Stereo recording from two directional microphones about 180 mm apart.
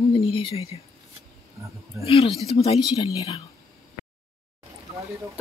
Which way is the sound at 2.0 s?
30° left (ahead or behind).